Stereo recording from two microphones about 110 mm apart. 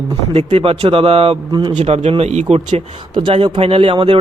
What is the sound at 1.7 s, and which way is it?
A man's voice, 80° right.